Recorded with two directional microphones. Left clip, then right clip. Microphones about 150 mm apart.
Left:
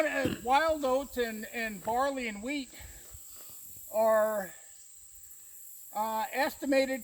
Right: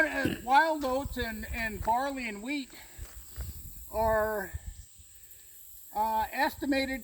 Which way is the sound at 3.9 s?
20° left (ahead or behind).